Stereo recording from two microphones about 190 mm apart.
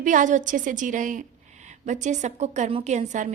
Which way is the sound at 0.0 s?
40° right (ahead or behind).